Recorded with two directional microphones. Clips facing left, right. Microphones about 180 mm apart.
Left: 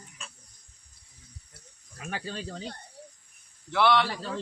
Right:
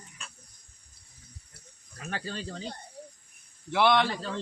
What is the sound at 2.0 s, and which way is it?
Speech, 10° left (ahead or behind).